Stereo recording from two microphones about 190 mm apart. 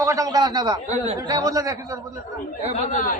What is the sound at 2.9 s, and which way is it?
Speech, 45° left (ahead or behind).